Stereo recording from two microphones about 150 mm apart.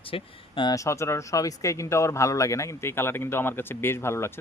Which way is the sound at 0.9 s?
20° left (ahead or behind).